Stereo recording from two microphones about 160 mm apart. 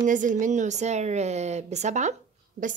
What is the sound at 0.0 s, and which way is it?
A woman's voice, 55° right (ahead or behind).